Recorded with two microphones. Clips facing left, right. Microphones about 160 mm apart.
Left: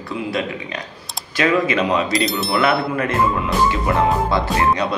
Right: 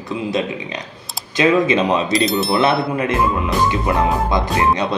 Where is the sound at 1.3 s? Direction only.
20° right (ahead or behind).